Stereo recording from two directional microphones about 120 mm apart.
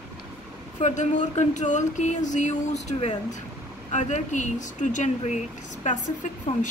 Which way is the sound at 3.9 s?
85° left.